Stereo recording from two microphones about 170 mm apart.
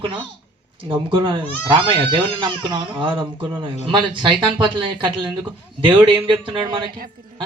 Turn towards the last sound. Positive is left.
turn(degrees=-30)  # may be behind; listen again after turning